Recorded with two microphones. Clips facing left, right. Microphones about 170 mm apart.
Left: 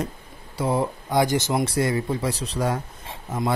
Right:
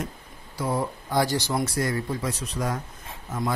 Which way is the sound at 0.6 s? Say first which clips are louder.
Left 4 dB; 25° left (ahead or behind).